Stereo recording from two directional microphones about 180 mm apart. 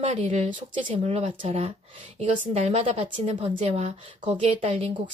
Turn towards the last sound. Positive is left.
turn(degrees=-35)  # may be behind; listen again after turning